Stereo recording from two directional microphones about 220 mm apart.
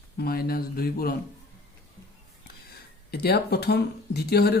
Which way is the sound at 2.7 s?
45° left (ahead or behind).